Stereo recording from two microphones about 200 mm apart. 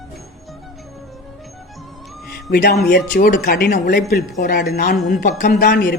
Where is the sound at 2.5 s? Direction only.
50° left (ahead or behind).